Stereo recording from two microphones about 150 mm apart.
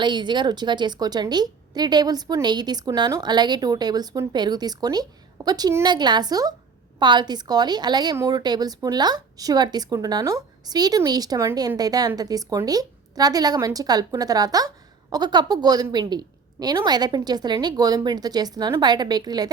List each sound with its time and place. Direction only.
0.0 s a woman's voice: 30° right (ahead or behind)